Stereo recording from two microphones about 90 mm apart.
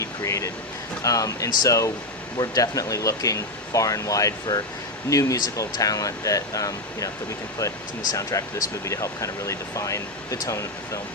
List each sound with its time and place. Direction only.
0.0 s music: 35° left (ahead or behind)
1.0 s speech: 40° left (ahead or behind)